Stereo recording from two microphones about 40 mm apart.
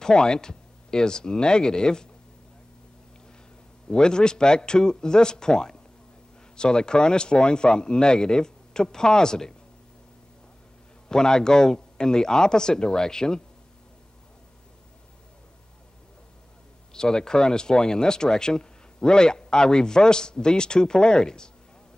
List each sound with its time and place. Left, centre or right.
0.0 s speech: left
3.9 s speech: centre
11.1 s speech: centre
16.9 s speech: centre